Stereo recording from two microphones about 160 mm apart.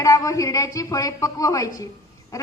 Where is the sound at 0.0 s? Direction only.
20° left (ahead or behind).